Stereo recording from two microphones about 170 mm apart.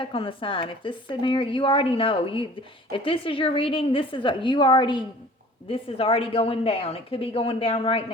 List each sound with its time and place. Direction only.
0.0 s speech: 30° left (ahead or behind)